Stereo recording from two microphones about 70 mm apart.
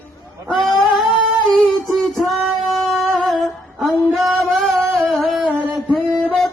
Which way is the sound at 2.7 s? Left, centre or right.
Centre.